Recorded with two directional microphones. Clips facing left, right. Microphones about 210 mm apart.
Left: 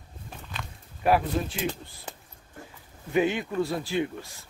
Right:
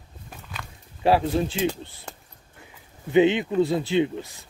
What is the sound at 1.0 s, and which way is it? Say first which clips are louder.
Speech: right 3 dB; 30° right (ahead or behind).